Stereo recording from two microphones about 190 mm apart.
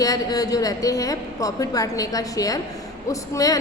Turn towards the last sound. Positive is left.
turn(degrees=20)  # may be behind; listen again after turning